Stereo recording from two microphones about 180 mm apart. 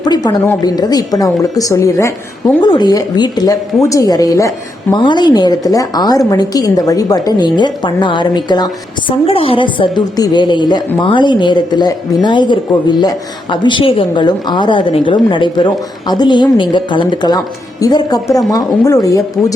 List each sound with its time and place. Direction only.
0.0 s a woman's voice: 20° left (ahead or behind)